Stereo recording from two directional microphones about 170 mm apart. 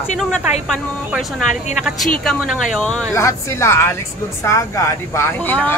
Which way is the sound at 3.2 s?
15° left (ahead or behind).